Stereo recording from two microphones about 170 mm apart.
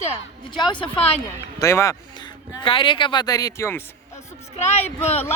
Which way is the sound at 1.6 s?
15° left (ahead or behind).